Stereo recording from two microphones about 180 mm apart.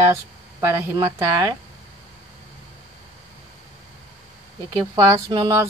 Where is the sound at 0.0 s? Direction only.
15° right (ahead or behind).